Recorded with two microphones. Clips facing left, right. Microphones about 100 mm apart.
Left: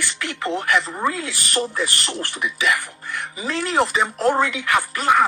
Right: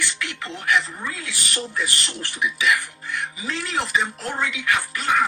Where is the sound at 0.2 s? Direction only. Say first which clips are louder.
Left 7 dB; 45° left (ahead or behind).